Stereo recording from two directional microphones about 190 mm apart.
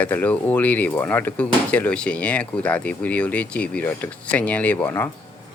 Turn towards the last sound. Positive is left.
turn(degrees=10)  # may be behind; listen again after turning